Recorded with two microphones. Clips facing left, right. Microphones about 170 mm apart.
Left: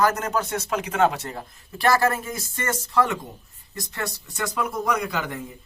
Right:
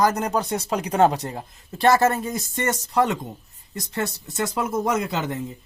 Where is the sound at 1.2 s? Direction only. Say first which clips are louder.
Right 2 dB; 15° right (ahead or behind).